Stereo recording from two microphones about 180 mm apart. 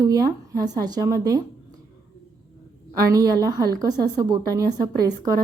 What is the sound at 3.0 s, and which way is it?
A woman's voice, 20° right (ahead or behind).